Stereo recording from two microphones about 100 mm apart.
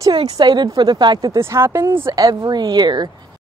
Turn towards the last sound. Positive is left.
turn(degrees=-45)  # may be behind; listen again after turning